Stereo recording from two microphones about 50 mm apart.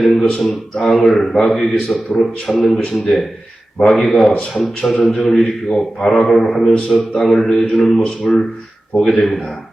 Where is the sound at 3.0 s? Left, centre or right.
Centre.